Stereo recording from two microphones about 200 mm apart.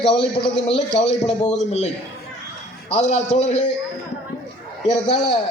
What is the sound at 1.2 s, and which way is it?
Speech, 35° left (ahead or behind).